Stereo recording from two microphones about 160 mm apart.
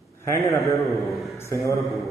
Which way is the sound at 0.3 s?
20° left (ahead or behind).